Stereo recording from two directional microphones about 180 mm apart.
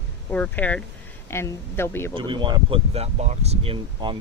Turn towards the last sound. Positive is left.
turn(degrees=-30)  # may be behind; listen again after turning